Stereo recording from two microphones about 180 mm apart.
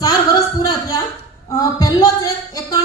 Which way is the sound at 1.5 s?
20° left (ahead or behind).